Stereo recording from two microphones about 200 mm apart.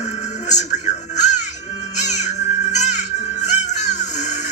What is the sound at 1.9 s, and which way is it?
Music, 35° left (ahead or behind).